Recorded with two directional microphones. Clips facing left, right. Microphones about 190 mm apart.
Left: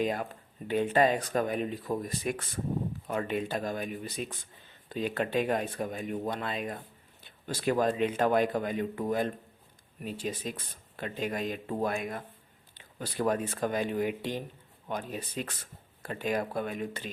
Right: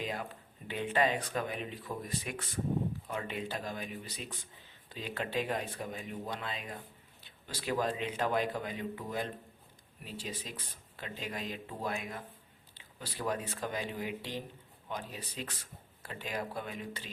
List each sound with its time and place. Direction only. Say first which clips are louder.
0.0 s speech: left 8 dB; 50° left (ahead or behind)